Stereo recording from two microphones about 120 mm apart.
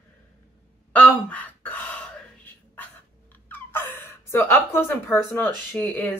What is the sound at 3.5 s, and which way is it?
Gasp, 15° left (ahead or behind).